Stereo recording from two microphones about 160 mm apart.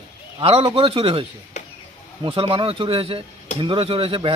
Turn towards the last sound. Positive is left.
turn(degrees=-35)  # may be behind; listen again after turning